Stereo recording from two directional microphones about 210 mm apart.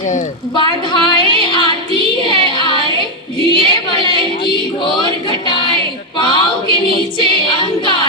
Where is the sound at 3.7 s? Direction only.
20° left (ahead or behind).